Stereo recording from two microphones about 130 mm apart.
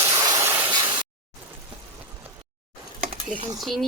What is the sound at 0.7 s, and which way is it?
Spray, 35° right (ahead or behind).